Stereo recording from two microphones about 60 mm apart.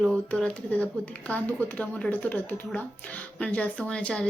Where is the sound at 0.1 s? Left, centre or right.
Centre.